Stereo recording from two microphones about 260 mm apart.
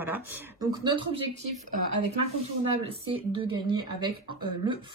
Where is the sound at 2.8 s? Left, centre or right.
Right.